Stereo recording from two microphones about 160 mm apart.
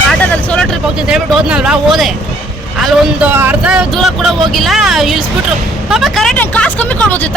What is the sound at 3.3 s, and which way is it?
Speech, 10° right (ahead or behind).